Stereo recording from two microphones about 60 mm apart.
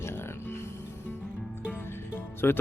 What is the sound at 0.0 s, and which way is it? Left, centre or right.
Music, left.